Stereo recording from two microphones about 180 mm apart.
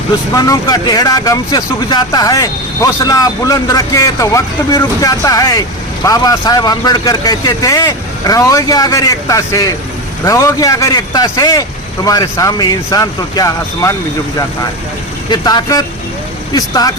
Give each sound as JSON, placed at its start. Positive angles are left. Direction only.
{"t": 0.3, "sound": "speech", "side_deg": 20}
{"t": 15.3, "sound": "speech", "side_deg": 25}